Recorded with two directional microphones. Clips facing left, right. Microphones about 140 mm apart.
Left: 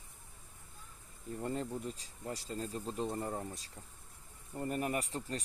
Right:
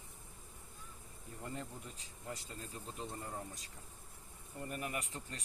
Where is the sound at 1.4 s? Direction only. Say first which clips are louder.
Left 8 dB; 35° left (ahead or behind).